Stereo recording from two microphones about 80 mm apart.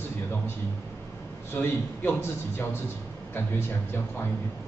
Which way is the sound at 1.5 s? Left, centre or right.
Left.